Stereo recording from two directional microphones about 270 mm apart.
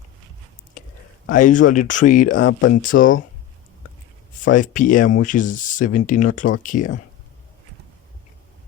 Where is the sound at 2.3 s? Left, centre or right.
Left.